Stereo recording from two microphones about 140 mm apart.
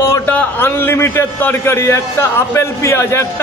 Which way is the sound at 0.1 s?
15° left (ahead or behind).